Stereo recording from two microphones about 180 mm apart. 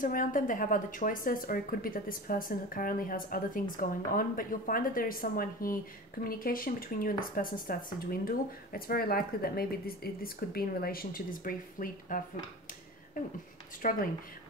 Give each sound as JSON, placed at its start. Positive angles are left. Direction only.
{"t": 0.0, "sound": "speech", "side_deg": 50}